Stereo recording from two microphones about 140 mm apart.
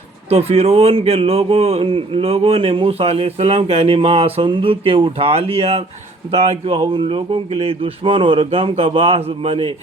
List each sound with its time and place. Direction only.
0.3 s a man's voice: 45° right (ahead or behind)